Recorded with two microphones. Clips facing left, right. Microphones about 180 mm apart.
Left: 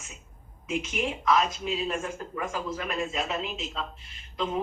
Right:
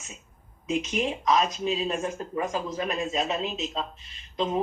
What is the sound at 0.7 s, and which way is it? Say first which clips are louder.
A man's voice: right 3 dB; 20° right (ahead or behind).